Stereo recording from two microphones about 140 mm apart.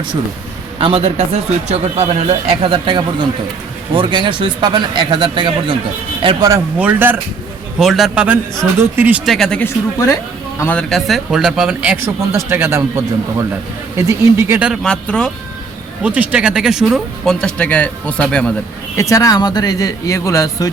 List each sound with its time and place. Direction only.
0.8 s speech: 40° right (ahead or behind); by 6.6 s 25° right (ahead or behind)
6.7 s speech: 10° right (ahead or behind)
7.8 s speech: centre (ahead or behind)
9.2 s speech: centre (ahead or behind)
9.6 s speech: 25° left (ahead or behind)
10.6 s speech: 10° left (ahead or behind); by 12.8 s 15° right (ahead or behind)
14.1 s speech: 20° right (ahead or behind)
14.8 s speech: 5° left (ahead or behind)
16.0 s speech: 10° right (ahead or behind); by 18.5 s 5° left (ahead or behind)
18.9 s speech: 25° left (ahead or behind)